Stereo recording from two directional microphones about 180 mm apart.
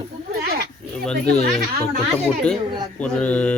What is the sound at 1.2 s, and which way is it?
Speech, 60° right (ahead or behind).